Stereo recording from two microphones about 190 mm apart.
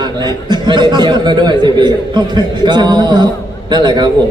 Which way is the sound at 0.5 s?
25° right (ahead or behind).